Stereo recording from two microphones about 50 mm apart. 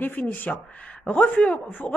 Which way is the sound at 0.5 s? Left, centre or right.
Left.